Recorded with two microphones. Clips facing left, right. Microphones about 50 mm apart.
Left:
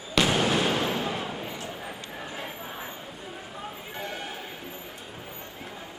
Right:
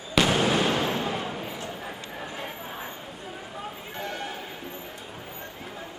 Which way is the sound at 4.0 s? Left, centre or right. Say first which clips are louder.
Right 2 dB; centre.